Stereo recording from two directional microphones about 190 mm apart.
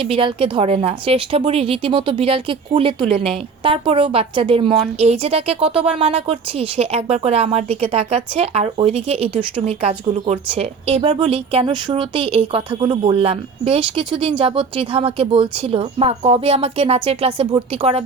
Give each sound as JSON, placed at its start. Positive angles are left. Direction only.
{"t": 0.0, "sound": "a woman's voice", "side_deg": -30}